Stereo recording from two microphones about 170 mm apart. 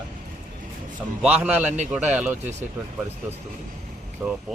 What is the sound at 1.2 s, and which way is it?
A man's voice, 10° right (ahead or behind).